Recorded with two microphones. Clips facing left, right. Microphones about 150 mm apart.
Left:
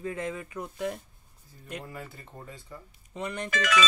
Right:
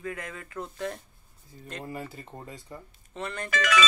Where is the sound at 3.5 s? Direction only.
80° right.